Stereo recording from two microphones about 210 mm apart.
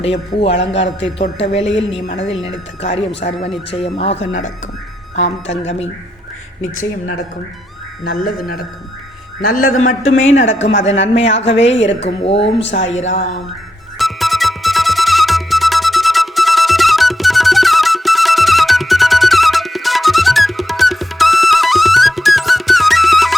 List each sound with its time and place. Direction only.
0.0 s speech: 30° left (ahead or behind)
0.5 s a man's voice: 60° left (ahead or behind)
1.2 s speech: 30° left (ahead or behind)
1.6 s a man's voice: 60° left (ahead or behind)
2.4 s speech: 30° left (ahead or behind)
3.2 s a woman's voice: 40° left (ahead or behind)
3.7 s speech: 25° left (ahead or behind)
8.0 s speech: 45° left (ahead or behind)
9.6 s speech: 75° left (ahead or behind)
10.2 s a woman's voice: 35° left (ahead or behind)
10.4 s a man's voice: 65° left (ahead or behind)
11.0 s speech: 30° left (ahead or behind)
14.0 s music: centre (ahead or behind)